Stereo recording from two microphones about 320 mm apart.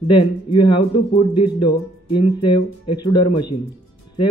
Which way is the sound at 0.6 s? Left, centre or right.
Centre.